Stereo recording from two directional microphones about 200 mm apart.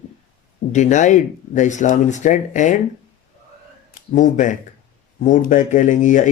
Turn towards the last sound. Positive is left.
turn(degrees=40)  # may be behind; listen again after turning